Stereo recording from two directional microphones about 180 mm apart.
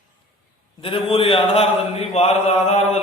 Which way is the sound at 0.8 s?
30° left (ahead or behind).